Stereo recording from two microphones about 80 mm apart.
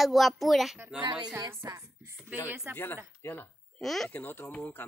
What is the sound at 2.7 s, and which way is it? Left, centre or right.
Speech, left.